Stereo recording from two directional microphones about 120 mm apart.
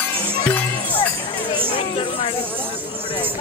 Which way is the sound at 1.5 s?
45° left (ahead or behind).